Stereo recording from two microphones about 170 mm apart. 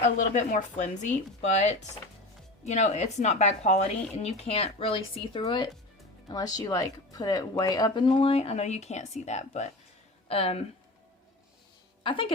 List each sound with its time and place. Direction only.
0.2 s speech: 45° left (ahead or behind)
12.0 s speech: 30° left (ahead or behind)